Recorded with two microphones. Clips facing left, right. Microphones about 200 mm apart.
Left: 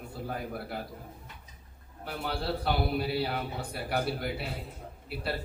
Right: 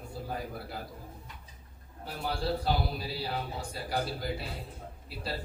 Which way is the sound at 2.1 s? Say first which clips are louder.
Even; 65° left (ahead or behind).